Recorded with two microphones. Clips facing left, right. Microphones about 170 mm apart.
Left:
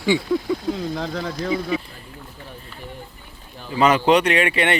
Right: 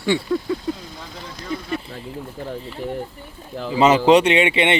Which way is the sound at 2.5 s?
90° right.